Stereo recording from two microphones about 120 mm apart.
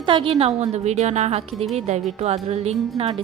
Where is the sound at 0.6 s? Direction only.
65° right (ahead or behind).